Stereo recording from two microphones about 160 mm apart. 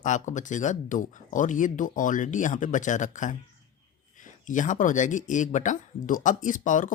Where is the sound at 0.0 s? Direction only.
50° left (ahead or behind).